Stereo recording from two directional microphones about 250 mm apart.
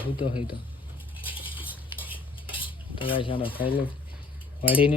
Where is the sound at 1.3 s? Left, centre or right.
Left.